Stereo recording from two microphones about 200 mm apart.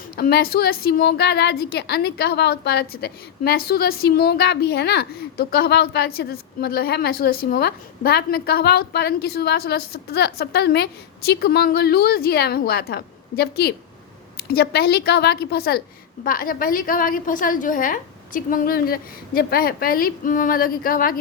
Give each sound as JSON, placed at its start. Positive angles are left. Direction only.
{"t": 0.2, "sound": "a woman's voice", "side_deg": 50}